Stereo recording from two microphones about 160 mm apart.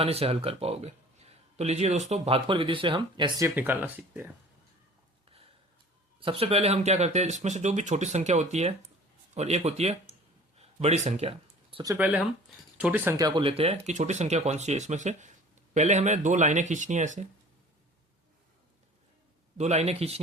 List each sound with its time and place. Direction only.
0.0 s speech: 40° right (ahead or behind)
3.5 s speech: 15° right (ahead or behind)
6.1 s speech: 35° right (ahead or behind)
10.6 s a sound: 40° right (ahead or behind)
11.9 s speech: 5° right (ahead or behind)
13.1 s speech: 30° right (ahead or behind); by 17.2 s 50° right (ahead or behind)
19.5 s speech: 45° right (ahead or behind)